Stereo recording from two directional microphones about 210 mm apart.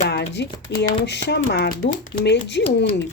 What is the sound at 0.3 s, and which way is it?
Speech, 55° left (ahead or behind).